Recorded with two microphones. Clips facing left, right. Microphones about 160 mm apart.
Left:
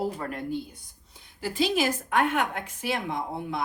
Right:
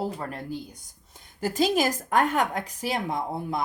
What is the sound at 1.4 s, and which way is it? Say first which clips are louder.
A woman's voice: right 2 dB; 45° right (ahead or behind).